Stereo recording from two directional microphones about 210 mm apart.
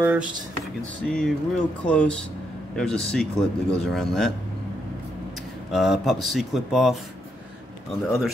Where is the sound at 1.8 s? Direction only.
5° left (ahead or behind).